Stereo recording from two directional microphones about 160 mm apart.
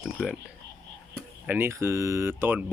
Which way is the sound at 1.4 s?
15° right (ahead or behind).